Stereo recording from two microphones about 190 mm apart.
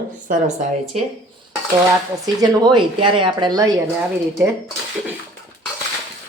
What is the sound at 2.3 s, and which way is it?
Speech, 20° right (ahead or behind).